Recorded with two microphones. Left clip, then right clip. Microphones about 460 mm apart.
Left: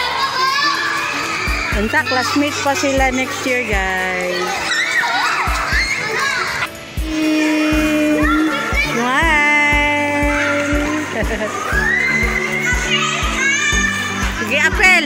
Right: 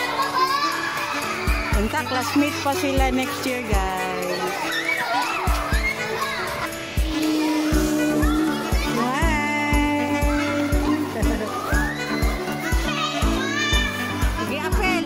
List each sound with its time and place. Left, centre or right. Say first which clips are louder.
9.1 s music: left 10 dB; right
14.5 s music: left 13 dB; right